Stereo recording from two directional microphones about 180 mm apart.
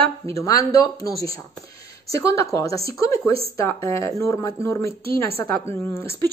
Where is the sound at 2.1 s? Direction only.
15° left (ahead or behind).